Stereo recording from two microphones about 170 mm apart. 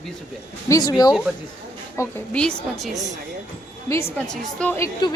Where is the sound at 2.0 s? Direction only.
15° left (ahead or behind).